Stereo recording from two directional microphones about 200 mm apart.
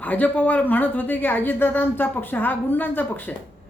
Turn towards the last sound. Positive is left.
turn(degrees=10)  # may be behind; listen again after turning